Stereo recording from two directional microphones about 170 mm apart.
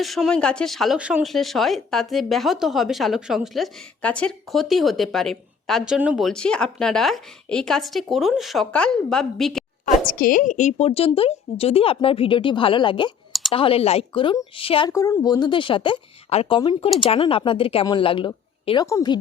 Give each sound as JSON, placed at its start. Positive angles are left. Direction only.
{"t": 0.0, "sound": "speech", "side_deg": 0}
{"t": 9.8, "sound": "a woman's voice", "side_deg": 55}
{"t": 14.8, "sound": "a woman's voice", "side_deg": 15}